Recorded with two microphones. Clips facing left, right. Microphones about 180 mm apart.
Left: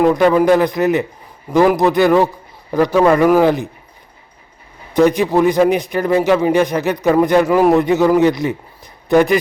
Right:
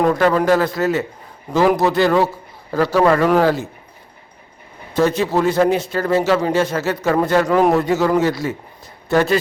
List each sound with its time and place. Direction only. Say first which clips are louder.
0.1 s a man's voice: left 3 dB; 15° left (ahead or behind)
4.9 s a man's voice: left 4 dB; 15° left (ahead or behind)